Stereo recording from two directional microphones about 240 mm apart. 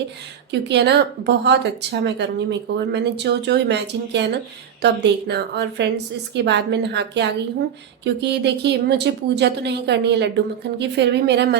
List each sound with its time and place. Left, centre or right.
0.7 s a woman's voice: right